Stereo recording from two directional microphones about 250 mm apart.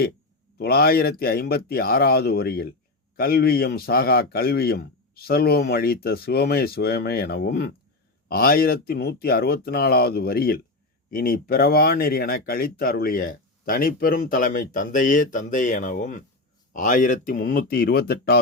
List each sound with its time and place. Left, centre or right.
0.6 s speech: left